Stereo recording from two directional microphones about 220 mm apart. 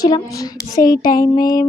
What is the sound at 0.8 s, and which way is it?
Child singing, 40° left (ahead or behind).